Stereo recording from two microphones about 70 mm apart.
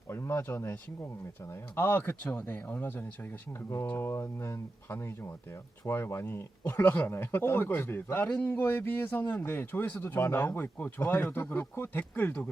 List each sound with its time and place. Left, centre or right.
0.1 s speech: left
1.7 s a man's voice: left